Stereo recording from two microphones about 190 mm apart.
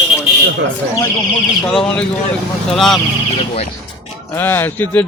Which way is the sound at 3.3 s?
35° left (ahead or behind).